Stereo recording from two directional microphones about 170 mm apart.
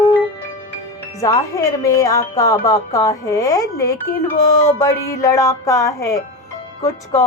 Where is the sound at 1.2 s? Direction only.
20° left (ahead or behind).